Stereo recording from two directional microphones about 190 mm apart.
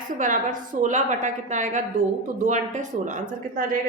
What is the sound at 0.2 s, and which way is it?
A woman's voice, 45° right (ahead or behind).